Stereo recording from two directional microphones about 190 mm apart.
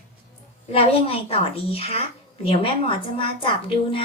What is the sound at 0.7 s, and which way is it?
A woman's voice, 30° left (ahead or behind).